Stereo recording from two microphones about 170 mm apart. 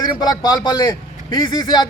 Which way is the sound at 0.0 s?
25° left (ahead or behind).